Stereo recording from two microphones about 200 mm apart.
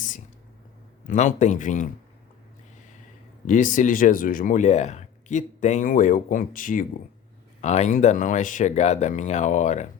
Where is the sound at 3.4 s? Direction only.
40° left (ahead or behind).